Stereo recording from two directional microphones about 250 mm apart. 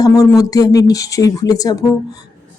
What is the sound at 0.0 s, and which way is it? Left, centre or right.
A woman's voice, centre.